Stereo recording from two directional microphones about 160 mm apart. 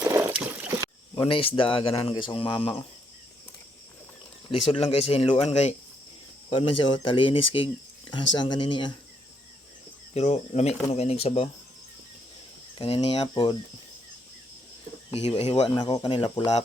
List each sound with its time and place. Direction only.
0.0 s boat: 15° right (ahead or behind)
1.1 s speech: 35° left (ahead or behind)
4.7 s speech: 35° left (ahead or behind)
10.2 s speech: 45° left (ahead or behind)
12.8 s speech: 35° left (ahead or behind)
15.1 s speech: 35° left (ahead or behind)